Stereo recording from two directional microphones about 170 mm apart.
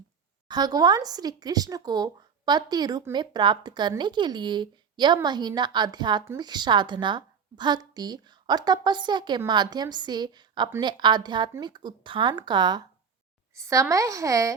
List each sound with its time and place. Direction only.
0.4 s speech: 25° right (ahead or behind)